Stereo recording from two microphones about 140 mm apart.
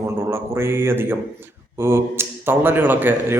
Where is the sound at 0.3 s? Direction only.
15° right (ahead or behind).